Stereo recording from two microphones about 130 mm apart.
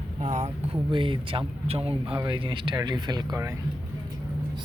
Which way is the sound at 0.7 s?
40° right (ahead or behind).